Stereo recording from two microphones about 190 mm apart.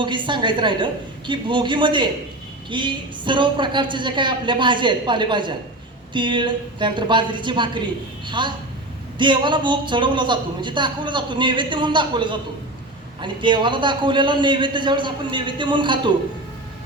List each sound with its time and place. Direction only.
0.0 s a man's voice: 25° right (ahead or behind)